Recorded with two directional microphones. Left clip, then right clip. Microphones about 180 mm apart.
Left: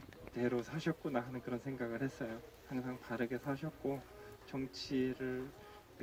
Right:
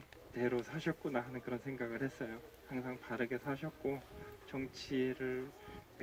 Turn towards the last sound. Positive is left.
turn(degrees=25)  # may be behind; listen again after turning